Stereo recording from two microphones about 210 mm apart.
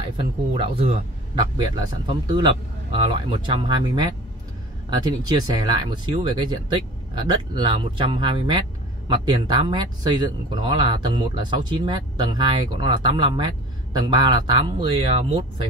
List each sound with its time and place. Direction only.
0.2 s speech: 25° right (ahead or behind)